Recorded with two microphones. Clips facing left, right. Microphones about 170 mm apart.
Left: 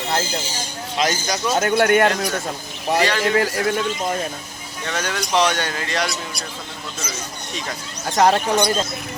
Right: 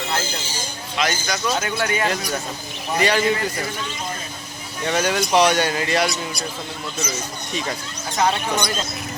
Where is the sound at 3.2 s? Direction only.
75° left (ahead or behind).